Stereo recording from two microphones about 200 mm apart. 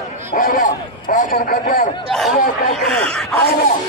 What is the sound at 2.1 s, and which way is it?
Speech, centre (ahead or behind).